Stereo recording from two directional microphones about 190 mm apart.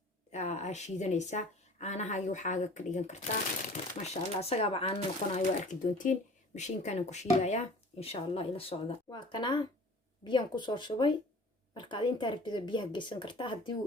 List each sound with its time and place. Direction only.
0.3 s speech: 35° left (ahead or behind)